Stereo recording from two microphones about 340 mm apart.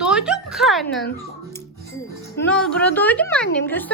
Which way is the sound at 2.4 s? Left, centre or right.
Centre.